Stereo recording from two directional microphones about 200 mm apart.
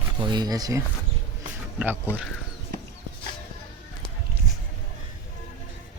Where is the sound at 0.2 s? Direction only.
20° right (ahead or behind).